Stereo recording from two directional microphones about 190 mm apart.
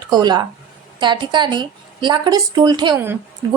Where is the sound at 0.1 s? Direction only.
20° right (ahead or behind).